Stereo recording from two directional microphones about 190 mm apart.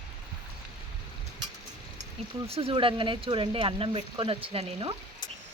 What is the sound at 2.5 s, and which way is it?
Speech, 30° right (ahead or behind).